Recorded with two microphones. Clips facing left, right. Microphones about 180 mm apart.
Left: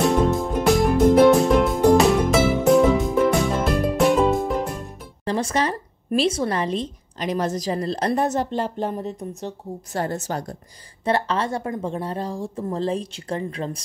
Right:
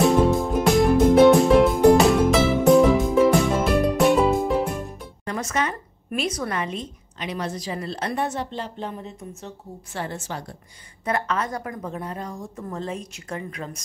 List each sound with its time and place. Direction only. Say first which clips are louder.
0.0 s music: right 1 dB; centre (ahead or behind)
5.2 s a woman's voice: left 4 dB; 30° left (ahead or behind)
11.1 s speech: left 3 dB; 30° left (ahead or behind)